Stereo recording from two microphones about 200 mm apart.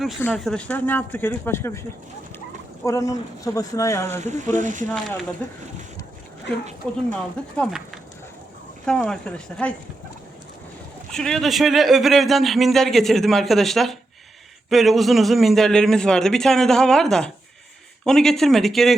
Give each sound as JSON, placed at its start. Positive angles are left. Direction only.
{"t": 0.2, "sound": "speech", "side_deg": 5}
{"t": 2.8, "sound": "speech", "side_deg": 15}
{"t": 4.5, "sound": "speech", "side_deg": -40}
{"t": 7.1, "sound": "a man's voice", "side_deg": 5}
{"t": 11.1, "sound": "a man's voice", "side_deg": 0}